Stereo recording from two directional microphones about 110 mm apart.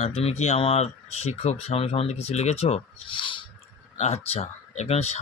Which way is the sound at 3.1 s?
50° left (ahead or behind).